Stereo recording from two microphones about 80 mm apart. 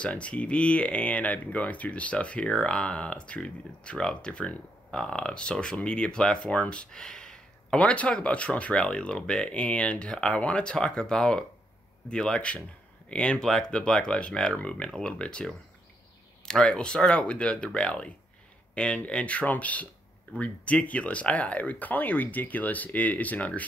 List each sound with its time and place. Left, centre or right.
0.0 s speech: centre